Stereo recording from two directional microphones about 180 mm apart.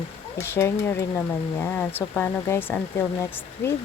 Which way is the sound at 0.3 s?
15° left (ahead or behind).